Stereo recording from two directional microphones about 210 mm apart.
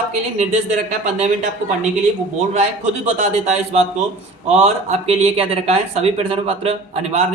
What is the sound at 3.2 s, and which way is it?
A man's voice, 30° right (ahead or behind).